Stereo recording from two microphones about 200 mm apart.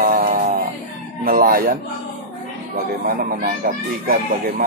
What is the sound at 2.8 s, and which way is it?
Speech, 45° right (ahead or behind).